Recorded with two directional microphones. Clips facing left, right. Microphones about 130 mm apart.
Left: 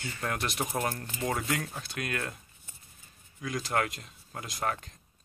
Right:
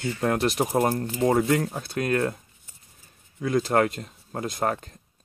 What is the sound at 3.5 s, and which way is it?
Speech, 40° right (ahead or behind).